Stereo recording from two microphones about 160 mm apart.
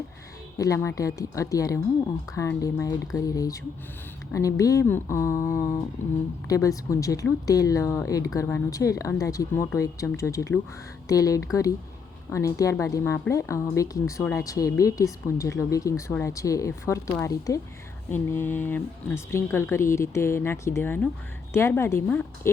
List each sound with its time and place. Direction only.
0.6 s speech: 20° left (ahead or behind)